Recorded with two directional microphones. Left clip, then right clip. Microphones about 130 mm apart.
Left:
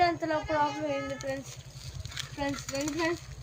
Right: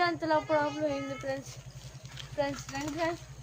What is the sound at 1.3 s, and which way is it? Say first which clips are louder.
Speech: right 2 dB; 15° right (ahead or behind).